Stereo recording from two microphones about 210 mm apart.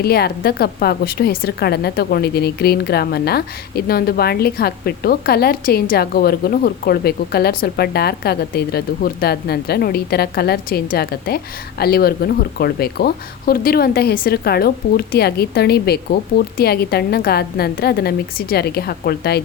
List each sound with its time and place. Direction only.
0.0 s a woman's voice: 50° left (ahead or behind)